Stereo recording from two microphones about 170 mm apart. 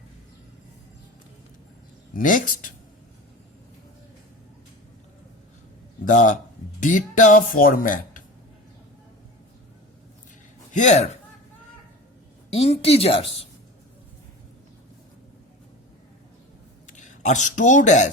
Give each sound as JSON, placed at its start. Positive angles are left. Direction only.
{"t": 2.1, "sound": "speech", "side_deg": 50}
{"t": 6.1, "sound": "speech", "side_deg": 50}
{"t": 10.8, "sound": "a woman's voice", "side_deg": 40}
{"t": 12.5, "sound": "a woman's voice", "side_deg": 35}
{"t": 17.0, "sound": "speech", "side_deg": 45}